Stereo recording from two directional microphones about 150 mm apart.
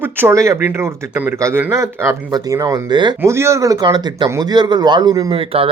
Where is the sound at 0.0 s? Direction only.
15° right (ahead or behind).